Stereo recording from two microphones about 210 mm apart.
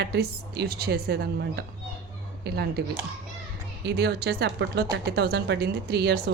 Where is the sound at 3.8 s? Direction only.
50° right (ahead or behind).